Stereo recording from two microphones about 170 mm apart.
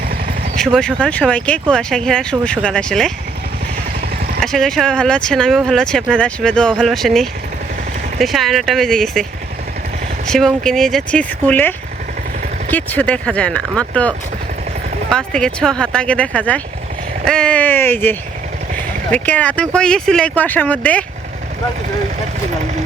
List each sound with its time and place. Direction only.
0.5 s speech: 5° left (ahead or behind)
4.4 s speech: 5° left (ahead or behind)
10.2 s speech: 5° left (ahead or behind)
12.7 s speech: 10° left (ahead or behind)
15.1 s speech: 5° left (ahead or behind)